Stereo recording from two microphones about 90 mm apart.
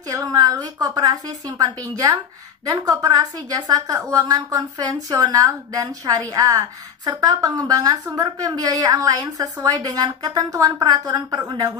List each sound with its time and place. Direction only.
0.1 s a woman's voice: 45° right (ahead or behind)